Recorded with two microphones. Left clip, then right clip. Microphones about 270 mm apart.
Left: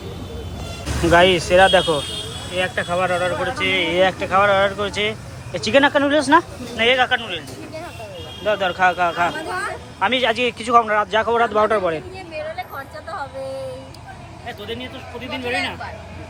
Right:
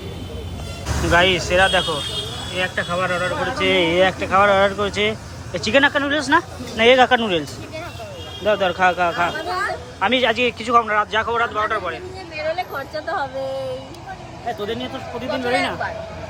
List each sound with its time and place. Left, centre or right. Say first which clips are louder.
1.1 s speech: left 2 dB; centre
3.6 s speech: right 1 dB; centre
8.4 s speech: right 1 dB; centre
12.5 s vehicle: right 5 dB; right
15.5 s speech: right 3 dB; right